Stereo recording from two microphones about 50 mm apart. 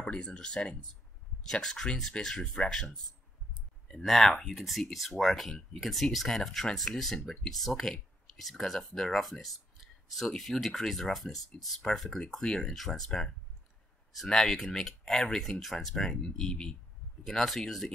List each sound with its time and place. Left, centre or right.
0.0 s speech: centre
3.9 s speech: centre
9.2 s a sound: centre
10.3 s speech: centre
15.9 s speech: centre